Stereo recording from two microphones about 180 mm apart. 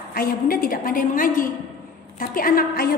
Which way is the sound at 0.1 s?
55° left (ahead or behind).